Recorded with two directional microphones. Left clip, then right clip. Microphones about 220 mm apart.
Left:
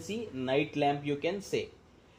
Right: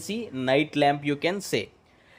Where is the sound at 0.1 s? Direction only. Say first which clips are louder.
Right 7 dB; 50° right (ahead or behind).